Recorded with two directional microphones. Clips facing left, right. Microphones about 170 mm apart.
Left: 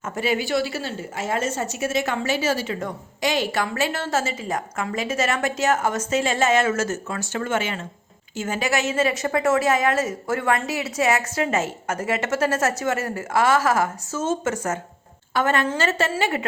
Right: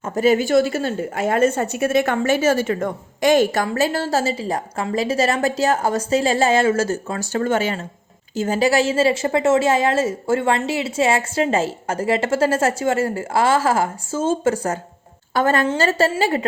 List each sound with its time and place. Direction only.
0.0 s a woman's voice: 40° right (ahead or behind)